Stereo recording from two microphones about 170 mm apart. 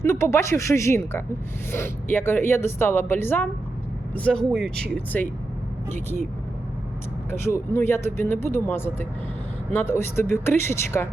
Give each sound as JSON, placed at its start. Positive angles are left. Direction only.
{"t": 0.0, "sound": "speech", "side_deg": 15}
{"t": 7.3, "sound": "speech", "side_deg": 15}